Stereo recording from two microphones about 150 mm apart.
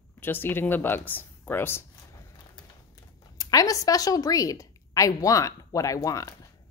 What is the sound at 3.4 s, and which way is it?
A woman's voice, 25° left (ahead or behind).